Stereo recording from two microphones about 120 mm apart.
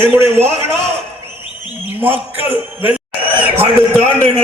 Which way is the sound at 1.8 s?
15° right (ahead or behind).